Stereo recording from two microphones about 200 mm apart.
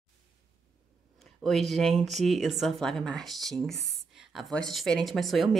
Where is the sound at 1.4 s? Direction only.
Centre (ahead or behind).